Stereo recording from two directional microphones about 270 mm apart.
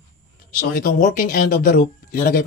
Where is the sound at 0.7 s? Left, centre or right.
Left.